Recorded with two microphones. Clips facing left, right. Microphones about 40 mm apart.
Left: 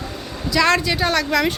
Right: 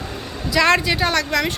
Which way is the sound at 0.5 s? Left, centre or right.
Centre.